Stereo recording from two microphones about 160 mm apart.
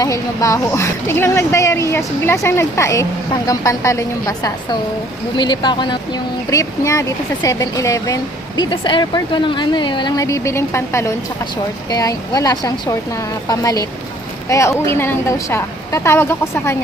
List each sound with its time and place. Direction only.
0.0 s speech: 20° left (ahead or behind)
8.7 s a woman's voice: 30° left (ahead or behind); by 16.7 s 15° left (ahead or behind)